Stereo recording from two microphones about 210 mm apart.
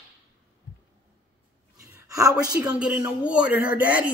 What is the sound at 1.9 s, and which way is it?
Speech, 15° right (ahead or behind).